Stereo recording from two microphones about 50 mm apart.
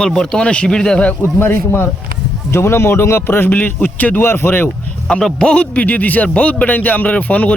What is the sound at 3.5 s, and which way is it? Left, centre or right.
Speech, left.